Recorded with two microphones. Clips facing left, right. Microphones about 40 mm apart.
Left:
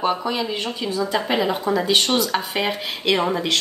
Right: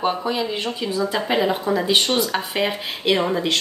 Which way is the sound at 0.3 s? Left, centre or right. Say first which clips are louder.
Right 1 dB; centre.